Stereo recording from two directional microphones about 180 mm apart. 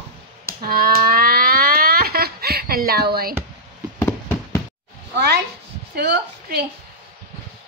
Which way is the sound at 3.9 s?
15° left (ahead or behind).